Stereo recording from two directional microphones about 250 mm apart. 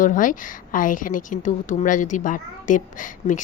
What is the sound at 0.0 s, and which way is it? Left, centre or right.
A woman's voice, left.